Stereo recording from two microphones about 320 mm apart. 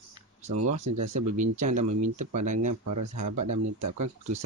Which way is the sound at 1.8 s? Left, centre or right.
Right.